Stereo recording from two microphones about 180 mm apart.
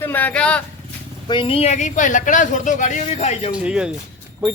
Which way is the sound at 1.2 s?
30° left (ahead or behind).